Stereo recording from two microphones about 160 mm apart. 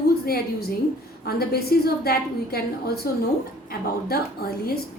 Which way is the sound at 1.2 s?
75° left (ahead or behind).